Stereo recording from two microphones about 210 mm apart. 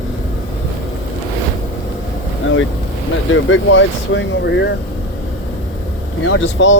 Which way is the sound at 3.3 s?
70° left (ahead or behind).